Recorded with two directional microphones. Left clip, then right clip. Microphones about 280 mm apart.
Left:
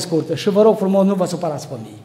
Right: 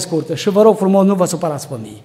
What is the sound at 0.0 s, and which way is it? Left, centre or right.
A man's voice, centre.